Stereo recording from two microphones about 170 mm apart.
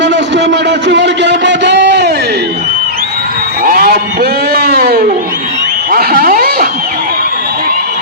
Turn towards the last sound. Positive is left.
turn(degrees=-60)  # may be behind; listen again after turning